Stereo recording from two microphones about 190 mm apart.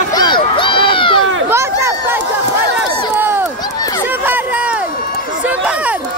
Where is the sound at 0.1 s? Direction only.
25° left (ahead or behind).